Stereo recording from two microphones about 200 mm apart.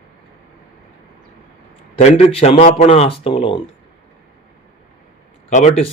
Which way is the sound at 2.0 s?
35° left (ahead or behind).